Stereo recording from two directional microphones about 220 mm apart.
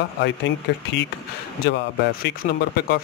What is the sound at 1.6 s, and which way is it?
Speech, 45° left (ahead or behind).